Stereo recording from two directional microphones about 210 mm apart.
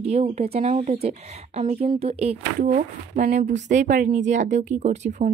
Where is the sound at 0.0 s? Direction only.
30° right (ahead or behind).